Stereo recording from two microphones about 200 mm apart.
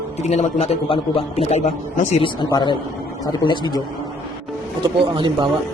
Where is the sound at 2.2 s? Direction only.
20° left (ahead or behind).